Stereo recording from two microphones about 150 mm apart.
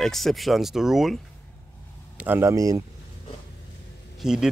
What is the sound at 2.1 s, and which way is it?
Speech, 10° right (ahead or behind).